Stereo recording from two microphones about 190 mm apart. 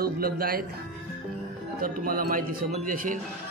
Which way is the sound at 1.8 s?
50° right (ahead or behind).